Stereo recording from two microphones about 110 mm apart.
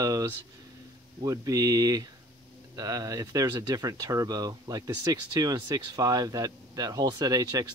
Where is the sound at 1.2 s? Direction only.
30° right (ahead or behind).